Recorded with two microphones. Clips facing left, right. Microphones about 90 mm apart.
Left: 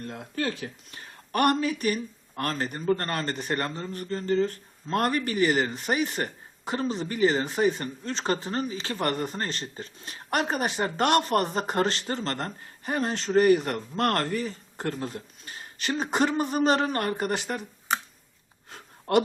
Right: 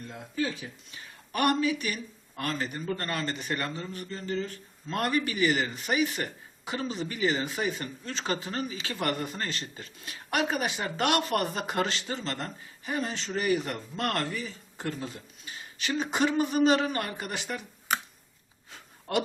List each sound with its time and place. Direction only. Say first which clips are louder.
0.0 s speech: left 2 dB; 60° left (ahead or behind); by 17.4 s 45° left (ahead or behind)
17.6 s finger snapping: left 2 dB; 5° right (ahead or behind)
18.7 s a sound: left 7 dB; 50° left (ahead or behind)